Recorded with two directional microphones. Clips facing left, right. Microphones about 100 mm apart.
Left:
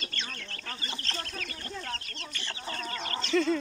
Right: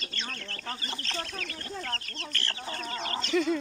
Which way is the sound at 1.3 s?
Centre (ahead or behind).